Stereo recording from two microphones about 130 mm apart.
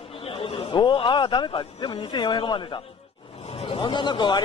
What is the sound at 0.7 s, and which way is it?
Speech, 40° left (ahead or behind).